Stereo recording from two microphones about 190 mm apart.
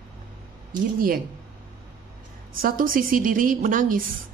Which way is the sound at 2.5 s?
45° right (ahead or behind).